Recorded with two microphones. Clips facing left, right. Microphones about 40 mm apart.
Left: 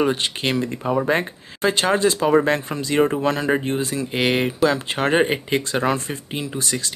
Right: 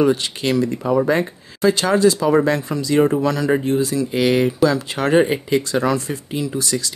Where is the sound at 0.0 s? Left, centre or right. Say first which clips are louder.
Right 3 dB; left.